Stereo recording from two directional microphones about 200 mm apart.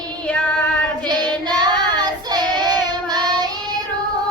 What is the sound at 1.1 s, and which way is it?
Child singing, 20° right (ahead or behind).